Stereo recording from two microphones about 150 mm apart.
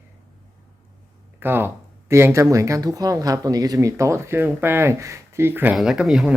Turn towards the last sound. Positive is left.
turn(degrees=-5)  # may be behind; listen again after turning